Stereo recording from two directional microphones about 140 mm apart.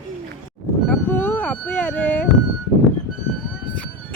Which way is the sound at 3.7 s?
5° left (ahead or behind).